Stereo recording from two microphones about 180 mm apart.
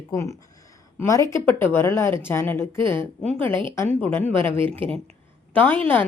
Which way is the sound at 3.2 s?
30° right (ahead or behind).